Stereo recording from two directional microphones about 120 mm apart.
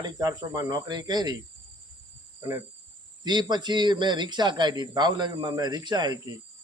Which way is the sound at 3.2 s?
35° right (ahead or behind).